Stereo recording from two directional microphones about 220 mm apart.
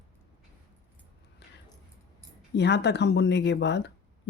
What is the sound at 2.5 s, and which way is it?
Speech, 50° left (ahead or behind).